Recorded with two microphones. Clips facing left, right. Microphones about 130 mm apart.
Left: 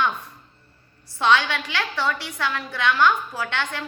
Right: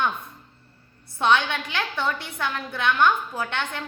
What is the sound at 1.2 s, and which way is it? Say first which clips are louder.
A woman's voice: left 1 dB; 20° right (ahead or behind).